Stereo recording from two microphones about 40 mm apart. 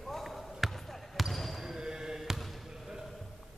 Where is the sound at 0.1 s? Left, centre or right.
Centre.